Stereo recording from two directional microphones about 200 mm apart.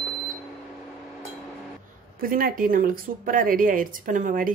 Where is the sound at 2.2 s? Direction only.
45° right (ahead or behind).